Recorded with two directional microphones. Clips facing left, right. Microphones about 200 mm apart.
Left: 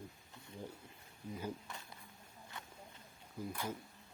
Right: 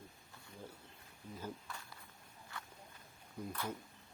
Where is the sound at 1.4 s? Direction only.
20° left (ahead or behind).